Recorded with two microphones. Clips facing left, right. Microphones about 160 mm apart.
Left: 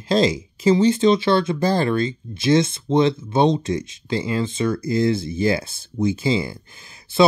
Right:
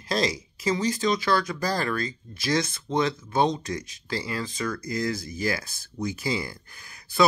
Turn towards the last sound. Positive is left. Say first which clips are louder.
# left 6 dB
turn(degrees=25)  # may be behind; listen again after turning